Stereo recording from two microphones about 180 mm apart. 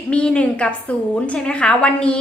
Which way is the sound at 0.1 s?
5° left (ahead or behind).